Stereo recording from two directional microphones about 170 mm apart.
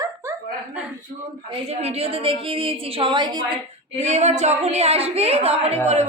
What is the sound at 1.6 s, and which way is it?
A woman's voice, 40° right (ahead or behind).